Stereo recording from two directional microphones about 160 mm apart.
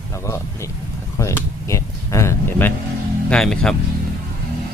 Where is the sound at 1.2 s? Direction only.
20° left (ahead or behind).